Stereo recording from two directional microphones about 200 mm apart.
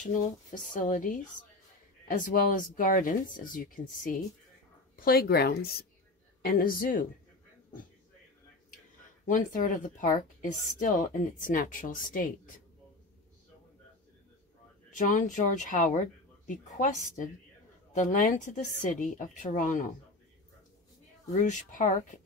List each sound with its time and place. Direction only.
0.0 s speech: 40° left (ahead or behind)
9.3 s speech: 40° left (ahead or behind)
15.0 s speech: 40° left (ahead or behind)
21.3 s speech: 40° left (ahead or behind)